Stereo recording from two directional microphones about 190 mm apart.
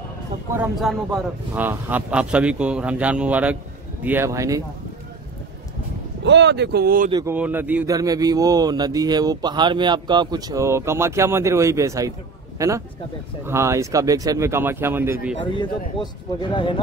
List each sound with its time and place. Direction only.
0.6 s a man's voice: centre (ahead or behind); by 4.6 s 15° right (ahead or behind)
6.2 s speech: 65° right (ahead or behind)
7.1 s a man's voice: 20° right (ahead or behind)
7.3 s a man's voice: 10° right (ahead or behind)
16.0 s speech: 25° left (ahead or behind)